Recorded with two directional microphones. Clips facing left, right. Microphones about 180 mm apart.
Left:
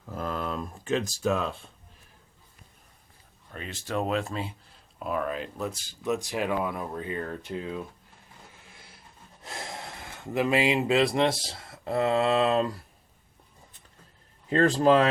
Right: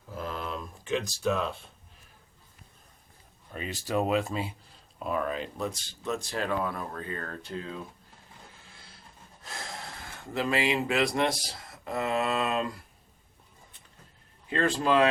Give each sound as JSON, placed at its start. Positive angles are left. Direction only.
{"t": 0.0, "sound": "a sound", "side_deg": 50}
{"t": 3.5, "sound": "speech", "side_deg": -10}
{"t": 9.4, "sound": "gasp", "side_deg": 25}
{"t": 10.3, "sound": "speech", "side_deg": 20}
{"t": 14.5, "sound": "speech", "side_deg": 40}